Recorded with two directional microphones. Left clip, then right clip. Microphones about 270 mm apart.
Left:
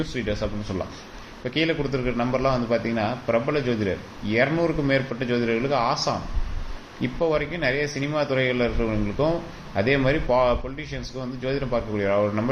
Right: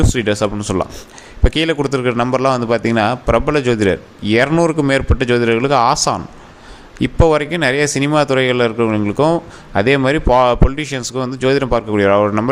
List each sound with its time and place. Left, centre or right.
0.1 s a man's voice: right